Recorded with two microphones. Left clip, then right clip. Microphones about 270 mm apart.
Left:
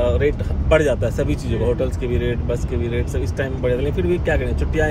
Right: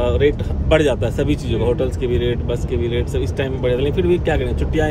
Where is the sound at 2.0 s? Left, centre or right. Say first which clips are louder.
Right 3 dB; right.